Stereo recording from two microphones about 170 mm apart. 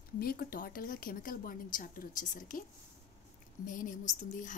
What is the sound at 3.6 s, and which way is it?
Speech, 50° left (ahead or behind).